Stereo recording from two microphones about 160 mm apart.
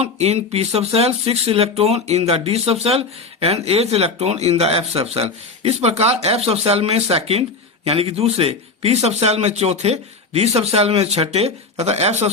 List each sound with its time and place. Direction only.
0.0 s speech: 40° right (ahead or behind)